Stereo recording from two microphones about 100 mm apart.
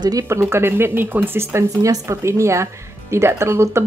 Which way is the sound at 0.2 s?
25° right (ahead or behind).